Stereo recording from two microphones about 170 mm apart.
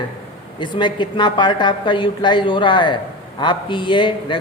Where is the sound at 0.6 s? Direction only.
25° left (ahead or behind).